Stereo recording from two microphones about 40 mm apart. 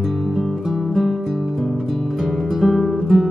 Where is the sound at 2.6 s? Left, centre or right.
Centre.